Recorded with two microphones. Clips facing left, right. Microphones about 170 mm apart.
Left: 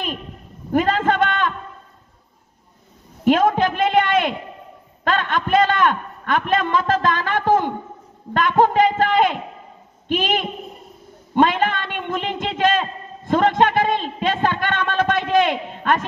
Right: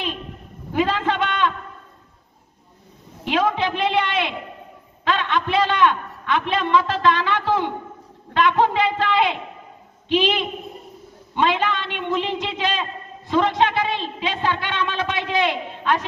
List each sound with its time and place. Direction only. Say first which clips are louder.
0.7 s a man's voice: left 3 dB; 45° left (ahead or behind)
3.3 s a man's voice: left 5 dB; 50° left (ahead or behind)